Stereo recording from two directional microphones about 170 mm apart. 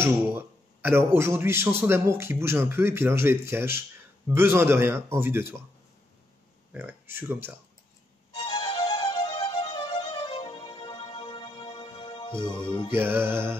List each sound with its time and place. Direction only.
0.0 s a man's voice: 10° right (ahead or behind)
6.7 s speech: 10° right (ahead or behind)
8.5 s music: 30° left (ahead or behind)
12.9 s a man's voice: 15° right (ahead or behind)